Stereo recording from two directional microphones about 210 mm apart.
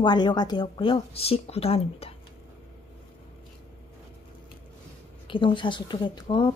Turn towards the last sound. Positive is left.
turn(degrees=20)  # may be behind; listen again after turning